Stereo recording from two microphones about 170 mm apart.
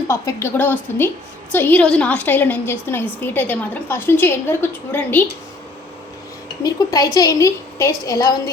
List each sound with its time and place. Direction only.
0.1 s a woman's voice: 15° left (ahead or behind)
6.6 s a woman's voice: 20° left (ahead or behind)